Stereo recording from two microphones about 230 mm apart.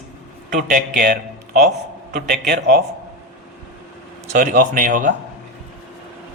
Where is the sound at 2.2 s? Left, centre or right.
Right.